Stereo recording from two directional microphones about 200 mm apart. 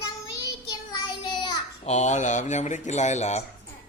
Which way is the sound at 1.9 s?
35° left (ahead or behind).